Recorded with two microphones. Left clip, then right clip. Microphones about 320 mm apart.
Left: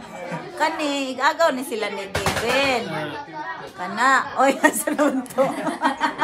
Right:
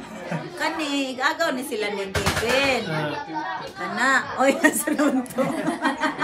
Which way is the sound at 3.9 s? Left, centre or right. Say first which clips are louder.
Left 3 dB; centre.